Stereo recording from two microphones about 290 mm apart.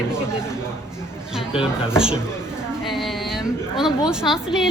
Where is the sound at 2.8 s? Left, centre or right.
Centre.